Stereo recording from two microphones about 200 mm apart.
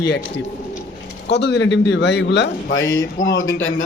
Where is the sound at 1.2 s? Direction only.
60° left (ahead or behind).